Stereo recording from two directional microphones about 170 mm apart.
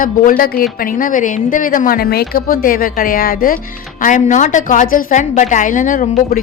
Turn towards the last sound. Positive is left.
turn(degrees=55)  # may be behind; listen again after turning